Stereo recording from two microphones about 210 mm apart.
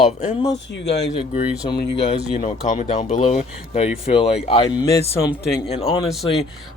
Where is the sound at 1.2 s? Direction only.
25° left (ahead or behind).